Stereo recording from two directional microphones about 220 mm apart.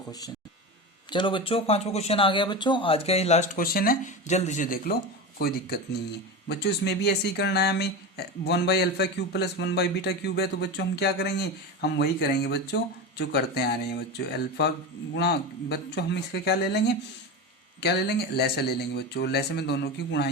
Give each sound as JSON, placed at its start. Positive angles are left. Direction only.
{"t": 0.1, "sound": "speech", "side_deg": 15}
{"t": 18.3, "sound": "speech", "side_deg": 45}